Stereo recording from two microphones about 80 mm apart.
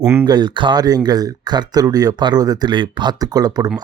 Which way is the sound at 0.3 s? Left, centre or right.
Right.